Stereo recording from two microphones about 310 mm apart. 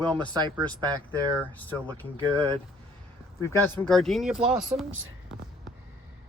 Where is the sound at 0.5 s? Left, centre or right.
Centre.